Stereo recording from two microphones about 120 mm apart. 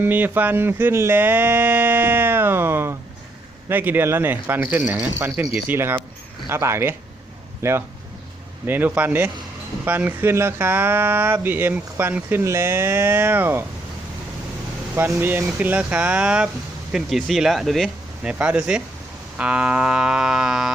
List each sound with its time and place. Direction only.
0.0 s speech: 15° right (ahead or behind)
14.9 s speech: 20° right (ahead or behind)